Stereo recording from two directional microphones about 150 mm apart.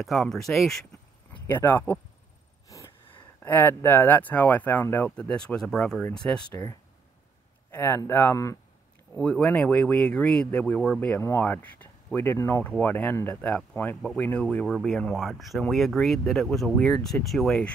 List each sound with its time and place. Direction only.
0.0 s speech: centre (ahead or behind)
1.5 s speech: 10° left (ahead or behind)
3.4 s speech: 15° left (ahead or behind)
9.1 s speech: 5° left (ahead or behind)